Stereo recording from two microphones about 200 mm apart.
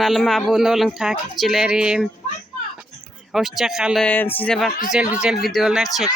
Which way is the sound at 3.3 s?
Centre (ahead or behind).